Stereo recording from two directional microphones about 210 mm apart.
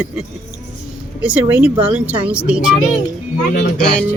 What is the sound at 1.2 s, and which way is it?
Speech, 5° right (ahead or behind).